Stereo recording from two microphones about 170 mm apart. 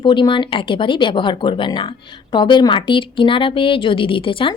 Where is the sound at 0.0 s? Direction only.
30° left (ahead or behind).